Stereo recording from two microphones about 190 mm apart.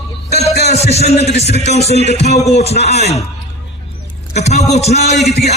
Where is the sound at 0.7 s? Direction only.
35° left (ahead or behind).